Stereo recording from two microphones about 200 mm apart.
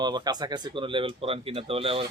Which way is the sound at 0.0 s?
20° right (ahead or behind).